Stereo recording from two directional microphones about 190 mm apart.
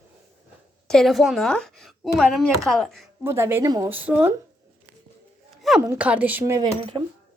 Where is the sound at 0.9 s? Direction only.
Centre (ahead or behind).